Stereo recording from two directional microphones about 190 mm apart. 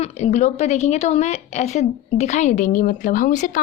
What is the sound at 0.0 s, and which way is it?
A woman's voice, 35° left (ahead or behind).